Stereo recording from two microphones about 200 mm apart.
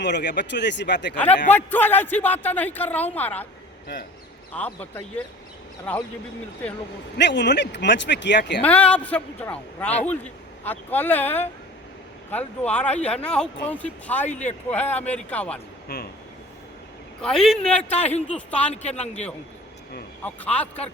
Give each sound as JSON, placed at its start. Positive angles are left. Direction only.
{"t": 0.0, "sound": "speech", "side_deg": 60}
{"t": 1.1, "sound": "a man's voice", "side_deg": 10}
{"t": 4.5, "sound": "a man's voice", "side_deg": 10}
{"t": 7.2, "sound": "speech", "side_deg": 60}
{"t": 8.6, "sound": "a man's voice", "side_deg": 5}
{"t": 15.9, "sound": "speech", "side_deg": 55}
{"t": 17.2, "sound": "a man's voice", "side_deg": 5}
{"t": 17.9, "sound": "a man's voice", "side_deg": 30}
{"t": 18.3, "sound": "a man's voice", "side_deg": 5}
{"t": 18.7, "sound": "a man's voice", "side_deg": 30}
{"t": 20.2, "sound": "a man's voice", "side_deg": 5}